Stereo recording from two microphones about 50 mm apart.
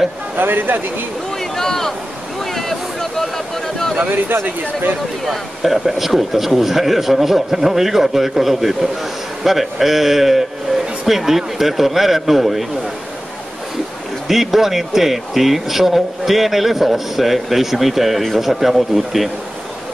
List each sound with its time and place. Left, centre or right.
0.4 s speech: right
1.6 s speech: centre
2.5 s a sound: centre
4.1 s speech: right
5.2 s speech: centre
14.2 s speech: centre